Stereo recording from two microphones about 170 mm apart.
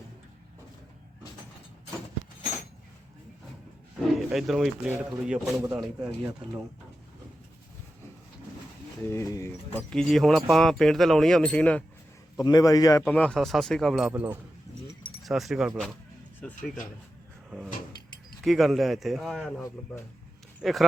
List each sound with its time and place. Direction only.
4.1 s speech: centre (ahead or behind)
9.0 s speech: 15° left (ahead or behind)
9.9 s speech: 5° left (ahead or behind)
12.4 s a man's voice: 20° left (ahead or behind)
13.1 s speech: 5° left (ahead or behind)
14.1 s speech: 15° right (ahead or behind)
15.2 s speech: centre (ahead or behind)
18.4 s speech: centre (ahead or behind)